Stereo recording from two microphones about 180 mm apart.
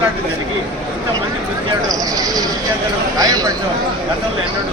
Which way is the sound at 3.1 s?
20° right (ahead or behind).